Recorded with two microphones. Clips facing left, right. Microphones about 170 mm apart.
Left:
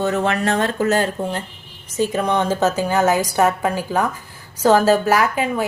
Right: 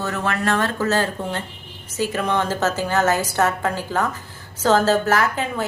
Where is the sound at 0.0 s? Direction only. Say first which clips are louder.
Left 4 dB; 20° left (ahead or behind).